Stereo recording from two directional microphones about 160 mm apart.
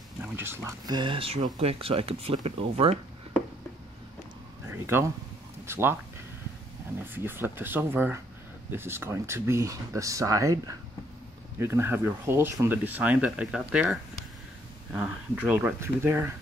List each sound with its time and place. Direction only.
0.2 s speech: 15° right (ahead or behind)
0.8 s speech: 30° right (ahead or behind)
4.6 s a sound: 15° right (ahead or behind)
5.7 s speech: 15° right (ahead or behind)
7.0 s speech: 15° right (ahead or behind)